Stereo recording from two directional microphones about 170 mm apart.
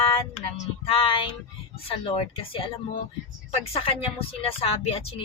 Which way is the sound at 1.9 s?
35° left (ahead or behind).